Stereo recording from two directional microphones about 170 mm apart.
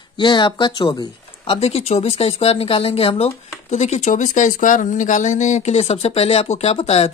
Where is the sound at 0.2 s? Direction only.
25° left (ahead or behind).